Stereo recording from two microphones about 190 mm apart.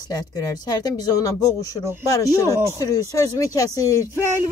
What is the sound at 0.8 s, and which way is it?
Speech, 20° left (ahead or behind).